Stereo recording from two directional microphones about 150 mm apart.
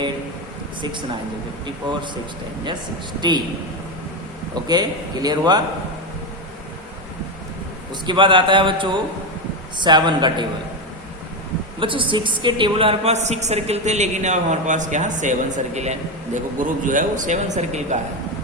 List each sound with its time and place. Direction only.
3.2 s a man's voice: 30° right (ahead or behind)
4.7 s a man's voice: 30° right (ahead or behind)
8.0 s speech: 35° right (ahead or behind)
11.8 s a woman's voice: 35° right (ahead or behind); by 17.9 s 50° right (ahead or behind)